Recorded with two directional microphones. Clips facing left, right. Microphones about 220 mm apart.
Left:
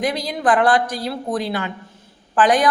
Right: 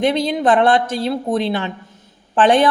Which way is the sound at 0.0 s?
25° right (ahead or behind).